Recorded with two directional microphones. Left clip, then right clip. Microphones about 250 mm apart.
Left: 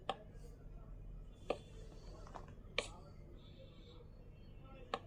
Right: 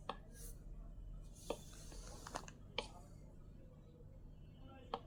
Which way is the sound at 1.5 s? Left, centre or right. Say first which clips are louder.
Left 4 dB; centre.